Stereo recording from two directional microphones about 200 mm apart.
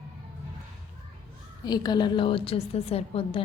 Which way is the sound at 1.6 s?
20° left (ahead or behind).